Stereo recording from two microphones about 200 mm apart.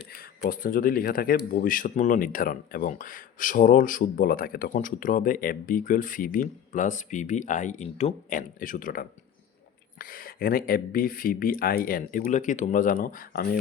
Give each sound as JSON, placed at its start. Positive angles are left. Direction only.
{"t": 0.1, "sound": "speech", "side_deg": 50}